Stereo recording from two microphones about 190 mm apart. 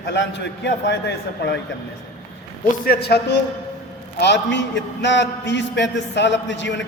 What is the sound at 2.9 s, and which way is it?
A man's voice, 55° left (ahead or behind).